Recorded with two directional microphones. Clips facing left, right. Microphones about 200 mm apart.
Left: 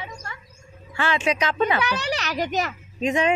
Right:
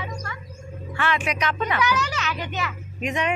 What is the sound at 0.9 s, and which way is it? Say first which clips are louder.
A child's voice: left 2 dB; 25° left (ahead or behind).